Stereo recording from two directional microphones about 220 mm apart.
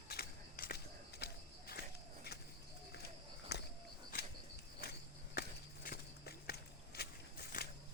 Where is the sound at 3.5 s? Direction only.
50° left (ahead or behind).